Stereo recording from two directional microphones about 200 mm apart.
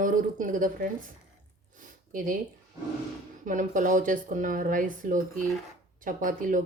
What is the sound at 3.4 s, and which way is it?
Speech, 40° right (ahead or behind).